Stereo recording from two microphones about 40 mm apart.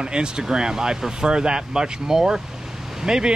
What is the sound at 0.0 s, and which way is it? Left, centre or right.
Speech, right.